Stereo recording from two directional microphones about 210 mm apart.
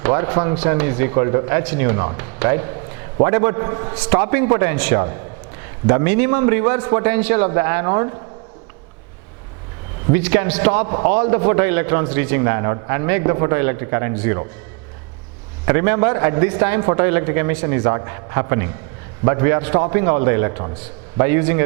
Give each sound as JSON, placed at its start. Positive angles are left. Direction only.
{"t": 0.0, "sound": "a man's voice", "side_deg": -15}
{"t": 3.9, "sound": "a man's voice", "side_deg": -10}
{"t": 10.1, "sound": "a man's voice", "side_deg": -10}
{"t": 15.6, "sound": "a man's voice", "side_deg": -15}